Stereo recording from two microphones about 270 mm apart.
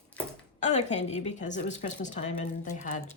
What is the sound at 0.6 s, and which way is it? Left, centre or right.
A woman's voice, left.